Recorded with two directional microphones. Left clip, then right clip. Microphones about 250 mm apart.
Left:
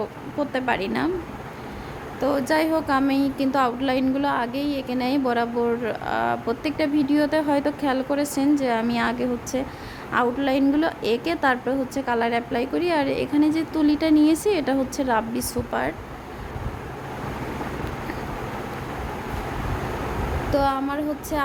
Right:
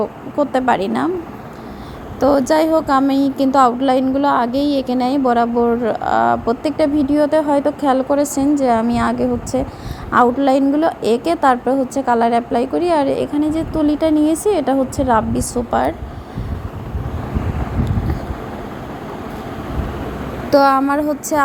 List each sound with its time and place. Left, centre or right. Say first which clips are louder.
0.0 s a woman's voice: right 9 dB; centre
2.5 s a woman's voice: right 7 dB; centre
20.5 s a woman's voice: right 11 dB; right